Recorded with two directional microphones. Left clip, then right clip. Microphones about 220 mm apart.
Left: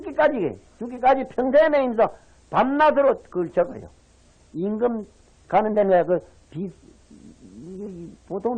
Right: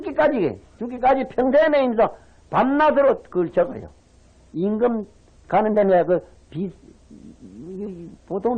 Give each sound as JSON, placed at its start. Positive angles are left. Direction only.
{"t": 0.0, "sound": "a man's voice", "side_deg": -30}
{"t": 8.3, "sound": "speech", "side_deg": -30}